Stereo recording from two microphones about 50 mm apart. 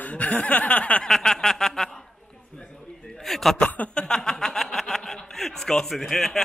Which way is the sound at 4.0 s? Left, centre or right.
Centre.